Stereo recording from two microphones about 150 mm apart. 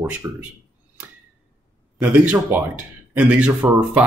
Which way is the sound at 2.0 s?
10° right (ahead or behind).